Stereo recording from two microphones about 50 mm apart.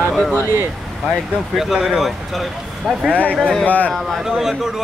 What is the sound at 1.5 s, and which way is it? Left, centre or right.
Speech, centre.